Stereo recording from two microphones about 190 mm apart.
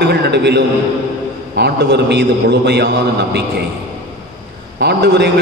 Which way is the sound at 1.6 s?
60° right (ahead or behind).